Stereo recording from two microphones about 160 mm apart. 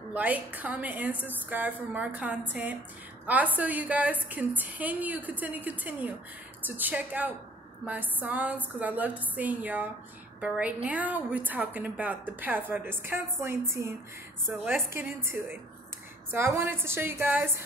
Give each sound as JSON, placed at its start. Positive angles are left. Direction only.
{"t": 0.1, "sound": "a woman's voice", "side_deg": -10}